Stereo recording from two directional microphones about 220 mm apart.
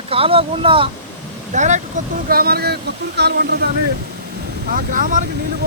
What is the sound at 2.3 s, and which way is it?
Speech, 45° right (ahead or behind).